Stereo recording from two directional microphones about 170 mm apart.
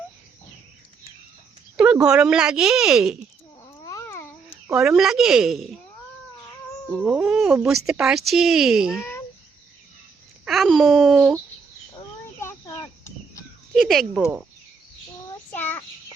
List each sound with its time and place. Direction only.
1.7 s a sound: 5° right (ahead or behind)
2.0 s speech: 5° right (ahead or behind)
3.8 s cat: 20° left (ahead or behind)
4.7 s speech: centre (ahead or behind)
6.9 s speech: 5° right (ahead or behind)
9.0 s a sound: 15° left (ahead or behind)
10.4 s a child's voice: centre (ahead or behind)
11.9 s a sound: 20° left (ahead or behind)
13.7 s speech: centre (ahead or behind)
15.5 s child singing: 10° left (ahead or behind)